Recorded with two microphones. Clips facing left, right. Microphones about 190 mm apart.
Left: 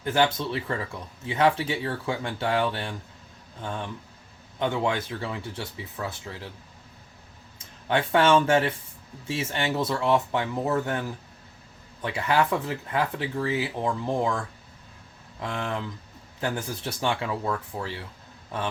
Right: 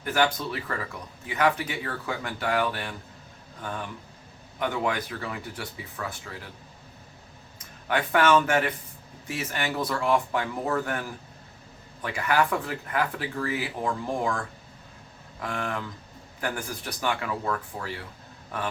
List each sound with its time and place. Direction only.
0.0 s speech: 25° left (ahead or behind)
7.9 s speech: 25° left (ahead or behind)
15.4 s speech: 25° left (ahead or behind)